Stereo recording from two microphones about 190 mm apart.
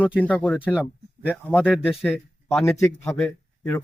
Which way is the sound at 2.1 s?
10° left (ahead or behind).